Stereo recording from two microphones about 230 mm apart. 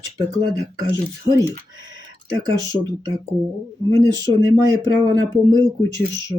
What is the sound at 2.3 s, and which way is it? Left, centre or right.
Speech, centre.